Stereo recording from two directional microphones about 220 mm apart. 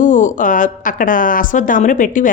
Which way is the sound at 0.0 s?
35° left (ahead or behind).